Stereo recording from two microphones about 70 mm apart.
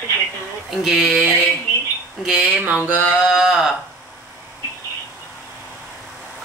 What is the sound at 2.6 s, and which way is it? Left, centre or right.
Mantra, right.